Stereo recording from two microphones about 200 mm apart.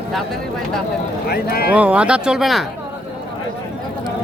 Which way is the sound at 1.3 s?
50° left (ahead or behind).